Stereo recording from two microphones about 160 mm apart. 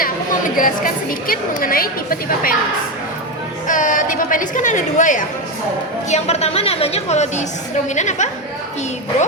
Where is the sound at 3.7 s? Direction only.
55° left (ahead or behind).